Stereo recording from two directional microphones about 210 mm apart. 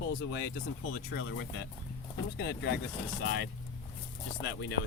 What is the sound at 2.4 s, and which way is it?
Speech, 55° left (ahead or behind).